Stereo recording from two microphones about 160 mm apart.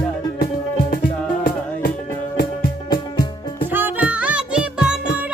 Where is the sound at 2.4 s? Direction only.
65° left (ahead or behind).